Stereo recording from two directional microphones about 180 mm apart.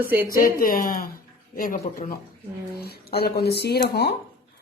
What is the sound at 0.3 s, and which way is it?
A woman's voice, 50° left (ahead or behind).